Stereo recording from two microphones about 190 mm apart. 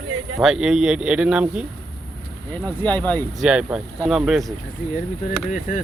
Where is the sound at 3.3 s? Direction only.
5° right (ahead or behind).